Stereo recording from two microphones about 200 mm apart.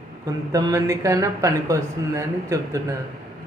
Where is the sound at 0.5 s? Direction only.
15° right (ahead or behind).